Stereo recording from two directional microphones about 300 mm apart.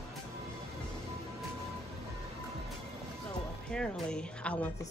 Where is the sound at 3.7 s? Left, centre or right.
Centre.